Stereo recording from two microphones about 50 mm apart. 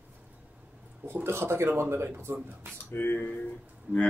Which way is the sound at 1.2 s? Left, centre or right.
Right.